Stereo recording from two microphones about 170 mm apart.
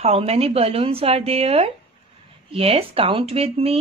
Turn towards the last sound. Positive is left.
turn(degrees=-35)  # may be behind; listen again after turning